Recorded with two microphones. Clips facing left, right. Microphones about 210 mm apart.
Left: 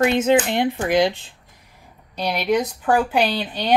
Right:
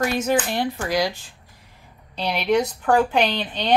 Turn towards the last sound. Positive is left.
turn(degrees=10)  # may be behind; listen again after turning